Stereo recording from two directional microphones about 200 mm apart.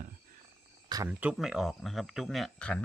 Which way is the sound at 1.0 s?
5° right (ahead or behind).